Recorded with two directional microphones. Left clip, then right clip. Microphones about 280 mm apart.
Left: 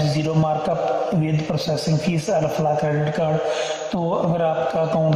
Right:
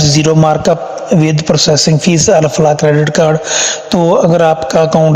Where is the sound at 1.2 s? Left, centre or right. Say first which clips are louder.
Right 13 dB; right.